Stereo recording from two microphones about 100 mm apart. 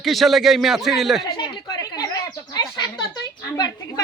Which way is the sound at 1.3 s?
50° left (ahead or behind).